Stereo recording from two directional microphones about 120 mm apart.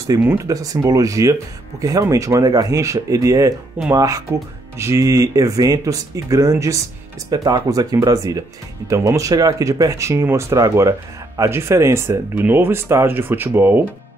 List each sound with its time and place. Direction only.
0.1 s speech: 30° right (ahead or behind)